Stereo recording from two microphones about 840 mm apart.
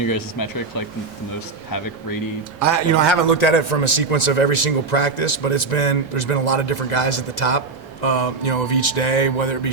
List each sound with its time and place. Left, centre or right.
2.6 s speech: left
3.2 s a man's voice: left